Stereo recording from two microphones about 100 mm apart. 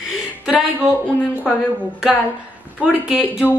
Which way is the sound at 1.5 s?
5° right (ahead or behind).